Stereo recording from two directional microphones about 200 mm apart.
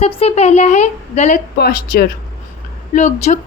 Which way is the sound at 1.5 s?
50° left (ahead or behind).